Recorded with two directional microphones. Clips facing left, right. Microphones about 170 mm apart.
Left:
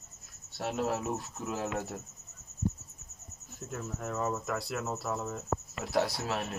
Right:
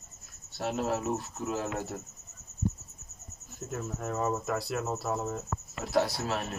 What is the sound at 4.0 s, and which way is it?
A man's voice, 10° right (ahead or behind).